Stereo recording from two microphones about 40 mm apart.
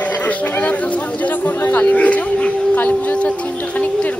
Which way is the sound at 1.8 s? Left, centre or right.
Left.